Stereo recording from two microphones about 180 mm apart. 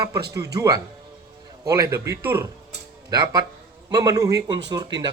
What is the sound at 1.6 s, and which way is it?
A man's voice, 15° right (ahead or behind).